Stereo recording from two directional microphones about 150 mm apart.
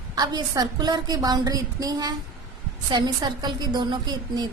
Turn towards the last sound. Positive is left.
turn(degrees=-30)  # may be behind; listen again after turning